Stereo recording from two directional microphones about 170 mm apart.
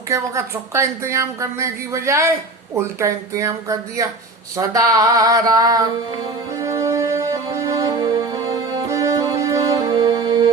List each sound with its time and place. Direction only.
0.1 s a woman's voice: 15° right (ahead or behind)
4.5 s a sound: 20° right (ahead or behind)
6.5 s music: 20° right (ahead or behind)